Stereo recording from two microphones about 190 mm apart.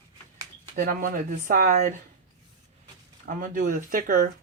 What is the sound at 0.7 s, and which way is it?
Speech, 45° right (ahead or behind).